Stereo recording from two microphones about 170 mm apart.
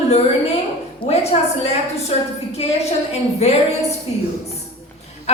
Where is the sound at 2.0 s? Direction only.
40° left (ahead or behind).